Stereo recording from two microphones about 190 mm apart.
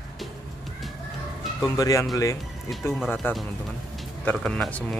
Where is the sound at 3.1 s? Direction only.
10° left (ahead or behind).